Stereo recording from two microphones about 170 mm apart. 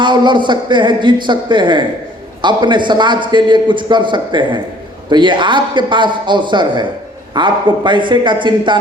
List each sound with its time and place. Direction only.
0.0 s a man's voice: 25° right (ahead or behind)